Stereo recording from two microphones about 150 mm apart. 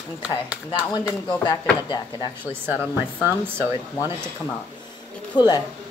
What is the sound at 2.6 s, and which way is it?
Speech, 15° right (ahead or behind).